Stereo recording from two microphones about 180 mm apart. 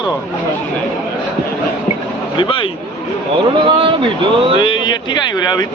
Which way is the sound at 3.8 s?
30° right (ahead or behind).